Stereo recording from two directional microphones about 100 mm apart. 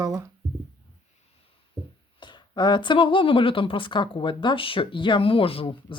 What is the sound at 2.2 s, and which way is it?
Speech, 50° left (ahead or behind).